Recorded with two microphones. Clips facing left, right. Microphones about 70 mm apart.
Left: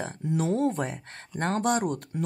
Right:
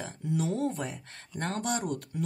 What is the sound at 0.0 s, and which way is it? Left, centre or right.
Speech, left.